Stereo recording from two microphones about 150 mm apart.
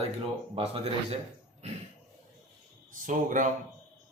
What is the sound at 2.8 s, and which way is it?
Speech, 60° right (ahead or behind).